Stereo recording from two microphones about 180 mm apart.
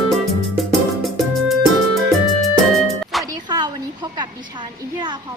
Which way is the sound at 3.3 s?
20° right (ahead or behind).